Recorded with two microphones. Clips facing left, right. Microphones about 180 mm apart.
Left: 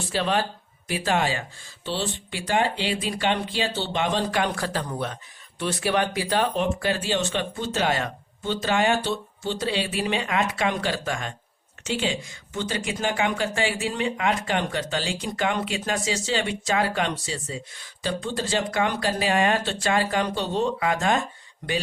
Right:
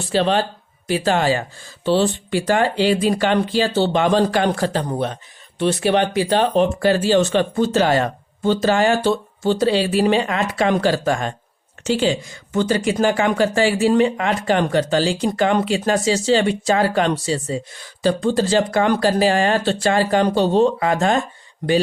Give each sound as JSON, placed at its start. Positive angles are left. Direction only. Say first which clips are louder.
{"t": 0.1, "sound": "speech", "louder": "right 7 dB", "side_deg": -30}